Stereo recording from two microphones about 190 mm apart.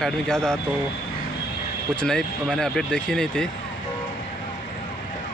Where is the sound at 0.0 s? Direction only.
5° left (ahead or behind).